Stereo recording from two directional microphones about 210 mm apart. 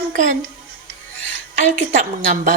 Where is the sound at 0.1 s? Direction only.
35° right (ahead or behind).